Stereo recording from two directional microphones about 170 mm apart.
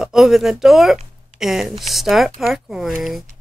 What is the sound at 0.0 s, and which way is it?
Speech, centre (ahead or behind).